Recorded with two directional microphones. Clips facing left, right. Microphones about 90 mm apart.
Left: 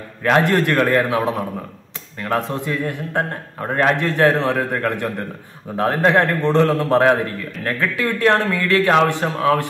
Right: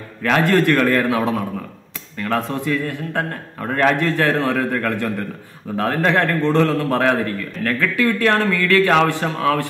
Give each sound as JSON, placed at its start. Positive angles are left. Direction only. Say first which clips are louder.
{"t": 0.2, "sound": "a man's voice", "louder": "even", "side_deg": 20}